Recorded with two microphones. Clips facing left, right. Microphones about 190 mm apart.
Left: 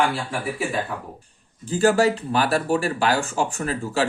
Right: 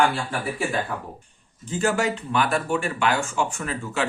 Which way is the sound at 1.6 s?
35° left (ahead or behind).